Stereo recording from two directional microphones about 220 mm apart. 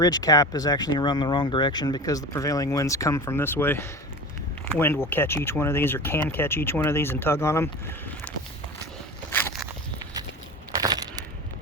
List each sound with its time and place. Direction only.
0.0 s speech: 15° left (ahead or behind)
10.7 s crushing: 15° right (ahead or behind)